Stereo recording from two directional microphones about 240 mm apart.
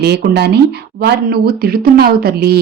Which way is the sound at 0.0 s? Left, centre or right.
Right.